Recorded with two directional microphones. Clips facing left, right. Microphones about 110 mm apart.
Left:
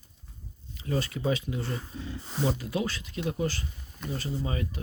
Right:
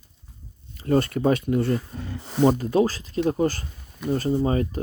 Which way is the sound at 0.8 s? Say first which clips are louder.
Right 9 dB; 55° right (ahead or behind).